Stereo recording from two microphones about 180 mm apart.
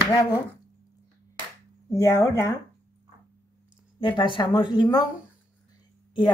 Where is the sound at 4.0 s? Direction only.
25° left (ahead or behind).